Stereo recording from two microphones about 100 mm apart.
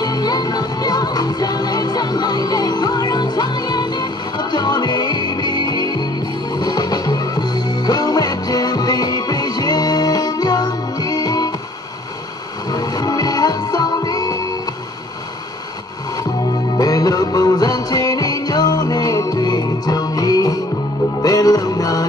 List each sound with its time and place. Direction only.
0.0 s music: 40° left (ahead or behind)
12.7 s music: 40° left (ahead or behind)
16.7 s music: 40° left (ahead or behind)